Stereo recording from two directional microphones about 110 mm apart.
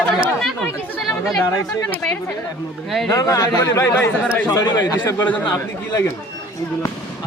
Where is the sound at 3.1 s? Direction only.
30° left (ahead or behind).